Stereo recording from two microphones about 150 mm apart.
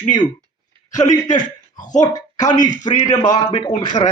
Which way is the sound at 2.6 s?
55° left (ahead or behind).